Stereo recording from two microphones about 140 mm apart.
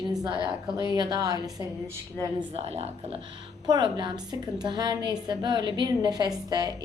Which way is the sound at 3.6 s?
30° right (ahead or behind).